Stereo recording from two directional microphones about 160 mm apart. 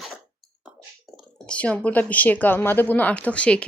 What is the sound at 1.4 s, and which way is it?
Speech, 10° left (ahead or behind).